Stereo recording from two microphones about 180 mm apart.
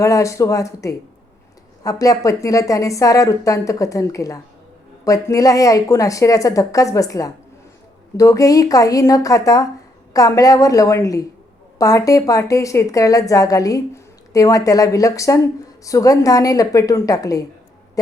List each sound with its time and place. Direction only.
0.0 s a woman's voice: 15° left (ahead or behind)